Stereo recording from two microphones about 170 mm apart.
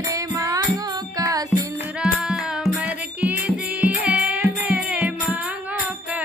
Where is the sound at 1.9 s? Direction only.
5° right (ahead or behind).